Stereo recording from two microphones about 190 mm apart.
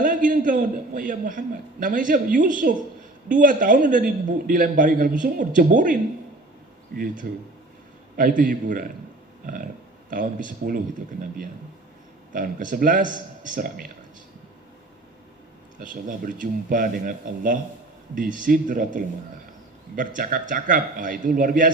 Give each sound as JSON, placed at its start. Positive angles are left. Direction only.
{"t": 0.0, "sound": "a man's voice", "side_deg": -45}
{"t": 10.1, "sound": "a man's voice", "side_deg": -45}
{"t": 12.3, "sound": "a man's voice", "side_deg": -45}
{"t": 15.8, "sound": "a man's voice", "side_deg": -45}